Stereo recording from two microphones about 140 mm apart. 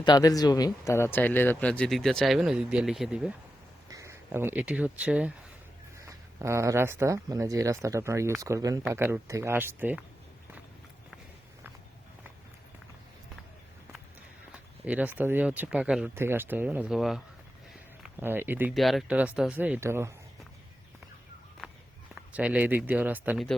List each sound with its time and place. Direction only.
0.0 s speech: 30° left (ahead or behind); by 3.3 s 5° right (ahead or behind)
3.8 s speech: 20° right (ahead or behind)
6.1 s speech: 20° right (ahead or behind)
14.8 s speech: 10° right (ahead or behind)
18.2 s speech: 15° right (ahead or behind)
18.7 s speech: centre (ahead or behind); by 20.1 s 20° right (ahead or behind)
22.1 s speech: 10° right (ahead or behind)